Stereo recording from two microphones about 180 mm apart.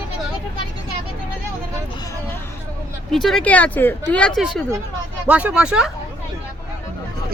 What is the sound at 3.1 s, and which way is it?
Speech, centre (ahead or behind).